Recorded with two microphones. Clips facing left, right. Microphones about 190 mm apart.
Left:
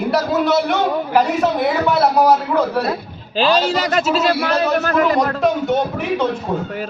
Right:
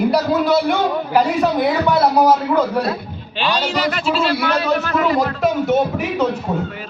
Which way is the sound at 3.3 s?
40° left (ahead or behind).